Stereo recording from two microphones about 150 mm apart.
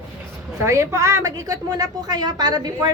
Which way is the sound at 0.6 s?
20° right (ahead or behind).